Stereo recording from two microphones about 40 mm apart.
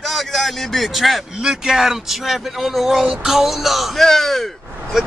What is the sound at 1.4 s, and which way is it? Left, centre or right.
Speech, centre.